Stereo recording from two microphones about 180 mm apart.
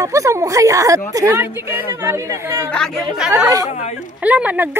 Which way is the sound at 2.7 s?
Centre (ahead or behind).